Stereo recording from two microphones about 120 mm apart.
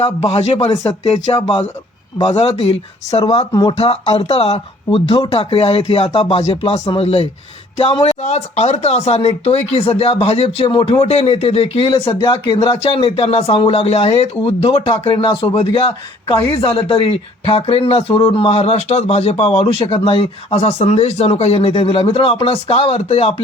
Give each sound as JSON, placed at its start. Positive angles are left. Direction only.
{"t": 0.3, "sound": "speech", "side_deg": 55}
{"t": 2.1, "sound": "speech", "side_deg": 45}
{"t": 3.5, "sound": "speech", "side_deg": 30}
{"t": 3.8, "sound": "speech", "side_deg": 55}
{"t": 8.2, "sound": "speech", "side_deg": 70}
{"t": 10.7, "sound": "speech", "side_deg": 45}
{"t": 11.0, "sound": "speech", "side_deg": 65}